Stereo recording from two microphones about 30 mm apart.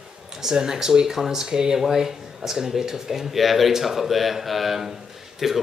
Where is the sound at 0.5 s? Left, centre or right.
Right.